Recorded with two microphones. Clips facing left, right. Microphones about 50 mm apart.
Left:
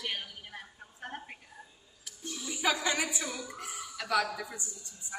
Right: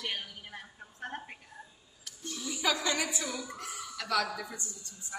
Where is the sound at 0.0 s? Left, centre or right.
Centre.